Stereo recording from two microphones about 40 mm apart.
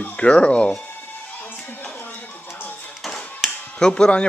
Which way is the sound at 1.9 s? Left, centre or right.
Left.